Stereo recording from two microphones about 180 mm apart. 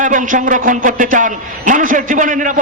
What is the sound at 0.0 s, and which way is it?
A man's voice, 45° right (ahead or behind).